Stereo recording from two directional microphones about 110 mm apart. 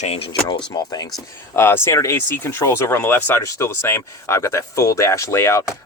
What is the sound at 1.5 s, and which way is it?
Speech, 20° left (ahead or behind).